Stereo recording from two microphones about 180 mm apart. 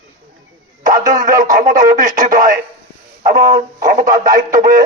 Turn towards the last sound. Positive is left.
turn(degrees=-45)  # may be behind; listen again after turning